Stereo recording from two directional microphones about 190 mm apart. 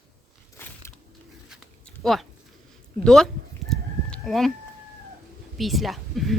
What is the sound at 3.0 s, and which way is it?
Chicken, centre (ahead or behind).